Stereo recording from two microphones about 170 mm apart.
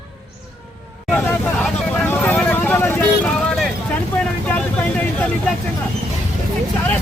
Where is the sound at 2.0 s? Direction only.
10° left (ahead or behind).